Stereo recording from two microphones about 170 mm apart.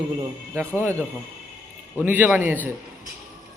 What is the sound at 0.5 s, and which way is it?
Speech, 15° right (ahead or behind).